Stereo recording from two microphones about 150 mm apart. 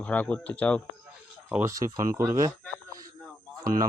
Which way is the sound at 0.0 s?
10° left (ahead or behind).